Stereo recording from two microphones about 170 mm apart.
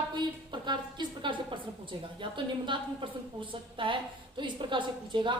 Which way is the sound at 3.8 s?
30° right (ahead or behind).